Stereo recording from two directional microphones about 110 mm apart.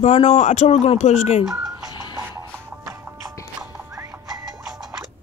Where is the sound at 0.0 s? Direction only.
75° left (ahead or behind).